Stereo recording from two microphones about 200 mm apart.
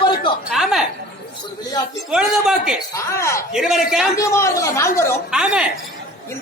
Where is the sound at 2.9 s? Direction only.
15° left (ahead or behind).